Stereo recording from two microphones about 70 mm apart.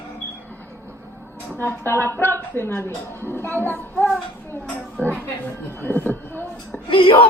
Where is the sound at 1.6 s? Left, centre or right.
Left.